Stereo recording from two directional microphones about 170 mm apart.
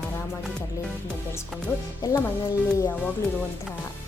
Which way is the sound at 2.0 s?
25° left (ahead or behind).